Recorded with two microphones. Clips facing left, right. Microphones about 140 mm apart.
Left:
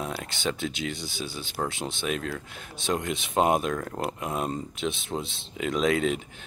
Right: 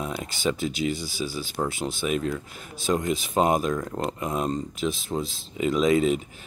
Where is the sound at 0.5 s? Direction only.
5° right (ahead or behind).